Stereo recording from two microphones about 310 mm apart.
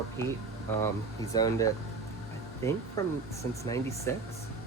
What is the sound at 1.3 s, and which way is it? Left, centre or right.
Speech, centre.